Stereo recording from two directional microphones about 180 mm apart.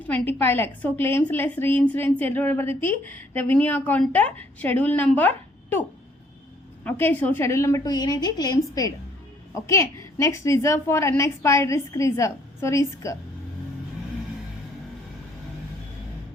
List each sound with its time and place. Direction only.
0.1 s a woman's voice: 10° left (ahead or behind)
6.8 s a woman's voice: 10° left (ahead or behind)